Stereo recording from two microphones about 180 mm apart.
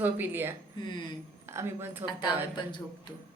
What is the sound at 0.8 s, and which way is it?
Speech, 25° left (ahead or behind).